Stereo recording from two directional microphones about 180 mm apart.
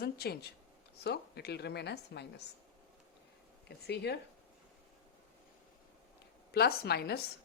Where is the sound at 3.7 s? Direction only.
65° left (ahead or behind).